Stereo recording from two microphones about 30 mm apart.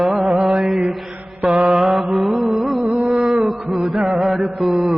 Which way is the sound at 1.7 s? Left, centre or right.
Right.